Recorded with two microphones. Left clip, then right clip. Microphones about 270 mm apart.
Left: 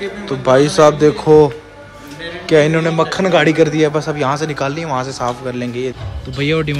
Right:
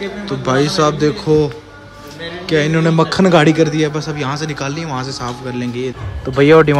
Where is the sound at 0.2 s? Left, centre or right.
Centre.